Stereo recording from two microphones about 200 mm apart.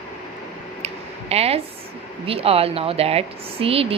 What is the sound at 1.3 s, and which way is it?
A woman's voice, 30° right (ahead or behind).